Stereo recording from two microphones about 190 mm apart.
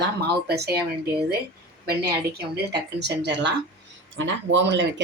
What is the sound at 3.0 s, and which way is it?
Speech, 70° right (ahead or behind).